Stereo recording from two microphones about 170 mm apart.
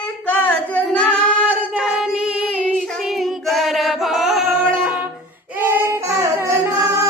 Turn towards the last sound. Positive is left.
turn(degrees=-15)  # may be behind; listen again after turning